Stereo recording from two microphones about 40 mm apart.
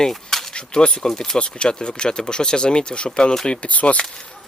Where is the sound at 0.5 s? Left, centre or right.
Left.